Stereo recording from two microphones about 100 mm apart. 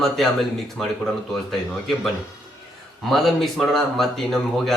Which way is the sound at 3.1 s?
Centre (ahead or behind).